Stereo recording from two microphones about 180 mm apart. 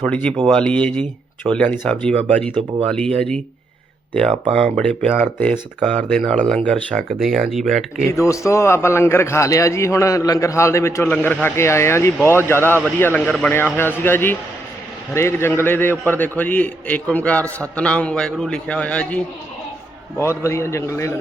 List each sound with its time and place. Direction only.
0.0 s a man's voice: 5° left (ahead or behind)
4.8 s a man's voice: 5° left (ahead or behind)
8.1 s a man's voice: 15° left (ahead or behind)